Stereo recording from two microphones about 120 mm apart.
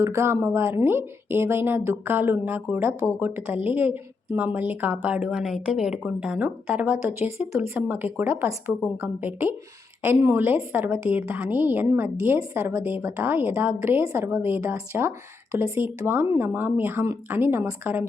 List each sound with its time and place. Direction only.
0.0 s a woman's voice: 20° right (ahead or behind)